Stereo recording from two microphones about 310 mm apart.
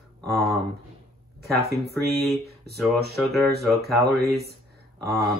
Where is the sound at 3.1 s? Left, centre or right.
Centre.